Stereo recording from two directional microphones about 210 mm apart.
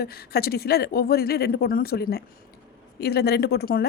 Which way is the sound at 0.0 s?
50° left (ahead or behind).